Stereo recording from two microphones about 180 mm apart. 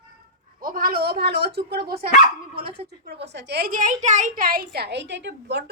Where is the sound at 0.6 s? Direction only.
55° right (ahead or behind).